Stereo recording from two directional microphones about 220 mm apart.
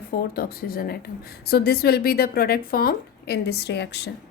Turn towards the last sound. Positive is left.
turn(degrees=50)  # may be behind; listen again after turning